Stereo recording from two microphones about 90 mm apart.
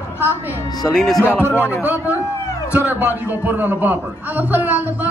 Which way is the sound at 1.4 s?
25° left (ahead or behind).